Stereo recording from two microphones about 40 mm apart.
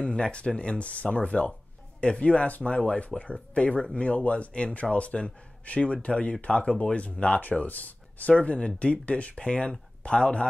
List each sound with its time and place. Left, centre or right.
0.0 s speech: left
3.1 s speech: centre
3.5 s speech: left